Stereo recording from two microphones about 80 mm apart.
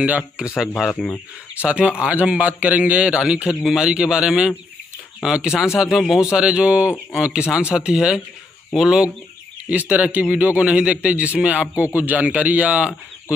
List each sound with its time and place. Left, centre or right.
0.0 s a man's voice: centre
1.0 s speech: centre
1.6 s a man's voice: centre